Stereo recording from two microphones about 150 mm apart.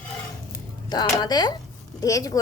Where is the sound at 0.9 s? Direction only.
30° left (ahead or behind).